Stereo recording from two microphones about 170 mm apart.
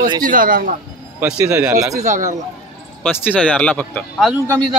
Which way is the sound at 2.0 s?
45° right (ahead or behind).